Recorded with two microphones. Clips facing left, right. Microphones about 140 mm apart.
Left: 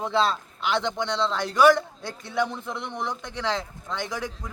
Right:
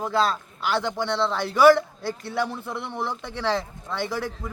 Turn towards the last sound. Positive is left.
turn(degrees=-10)  # may be behind; listen again after turning